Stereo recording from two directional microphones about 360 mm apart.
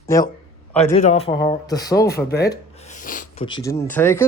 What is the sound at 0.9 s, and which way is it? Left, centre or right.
Speech, centre.